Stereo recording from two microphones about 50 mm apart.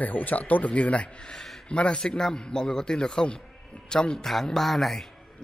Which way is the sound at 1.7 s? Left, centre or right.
Left.